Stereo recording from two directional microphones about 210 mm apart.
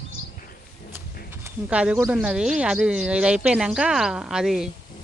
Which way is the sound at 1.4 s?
5° right (ahead or behind).